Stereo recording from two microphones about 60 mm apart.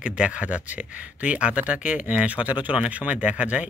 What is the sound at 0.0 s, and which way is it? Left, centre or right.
Speech, right.